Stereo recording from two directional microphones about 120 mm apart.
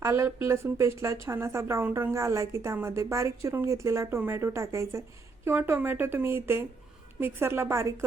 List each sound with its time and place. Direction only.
0.0 s speech: 20° right (ahead or behind)